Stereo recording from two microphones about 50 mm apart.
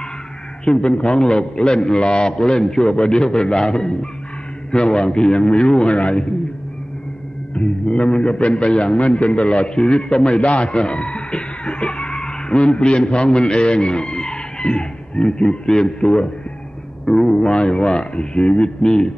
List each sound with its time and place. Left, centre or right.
0.7 s a man's voice: centre
7.5 s a man's voice: left